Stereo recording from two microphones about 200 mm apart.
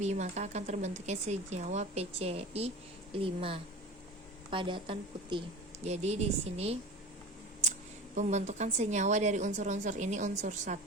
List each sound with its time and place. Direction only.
0.0 s a woman's voice: 35° right (ahead or behind)
7.6 s a sound: 35° right (ahead or behind)
8.1 s speech: 35° right (ahead or behind)